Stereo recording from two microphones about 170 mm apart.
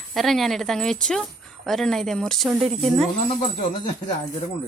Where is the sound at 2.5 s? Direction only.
35° right (ahead or behind).